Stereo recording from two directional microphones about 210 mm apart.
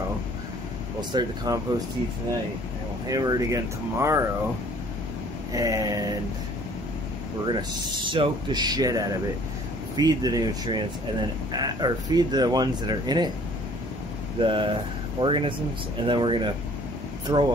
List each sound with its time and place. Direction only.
1.1 s speech: 20° right (ahead or behind)
3.1 s speech: 15° right (ahead or behind)
5.5 s speech: 15° right (ahead or behind)
7.4 s speech: 20° right (ahead or behind)
14.4 s speech: 25° right (ahead or behind)